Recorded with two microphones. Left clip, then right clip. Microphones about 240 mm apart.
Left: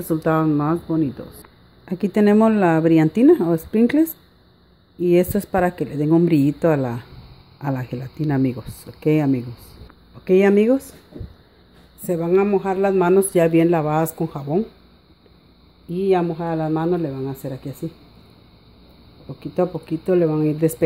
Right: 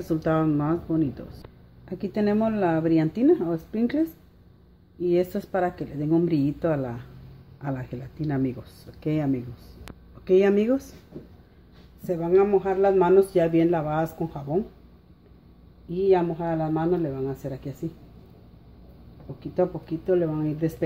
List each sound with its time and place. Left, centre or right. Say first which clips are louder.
0.0 s speech: left 5 dB; left
1.9 s speech: left 8 dB; left
5.0 s speech: left 6 dB; left
12.1 s speech: left 2 dB; left
15.9 s speech: left 2 dB; left
19.5 s speech: left 4 dB; left